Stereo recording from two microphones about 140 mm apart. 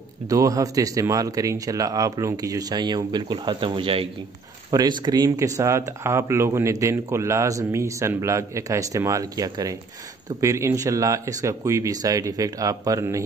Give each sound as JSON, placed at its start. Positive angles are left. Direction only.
{"t": 0.3, "sound": "speech", "side_deg": -25}
{"t": 4.6, "sound": "speech", "side_deg": -30}